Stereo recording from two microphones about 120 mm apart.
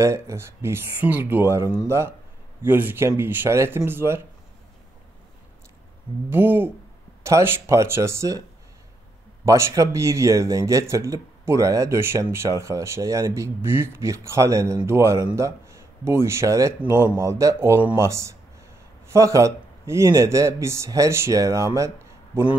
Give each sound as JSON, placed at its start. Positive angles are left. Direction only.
{"t": 0.0, "sound": "speech", "side_deg": -20}
{"t": 6.3, "sound": "speech", "side_deg": -15}